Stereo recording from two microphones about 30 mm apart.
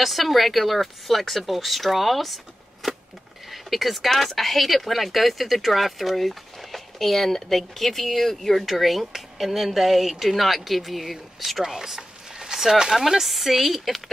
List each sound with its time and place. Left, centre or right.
0.0 s speech: centre
8.5 s speech: centre
11.6 s a sound: centre
13.2 s speech: centre